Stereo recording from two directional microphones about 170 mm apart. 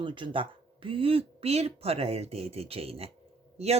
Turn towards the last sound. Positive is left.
turn(degrees=-40)  # may be behind; listen again after turning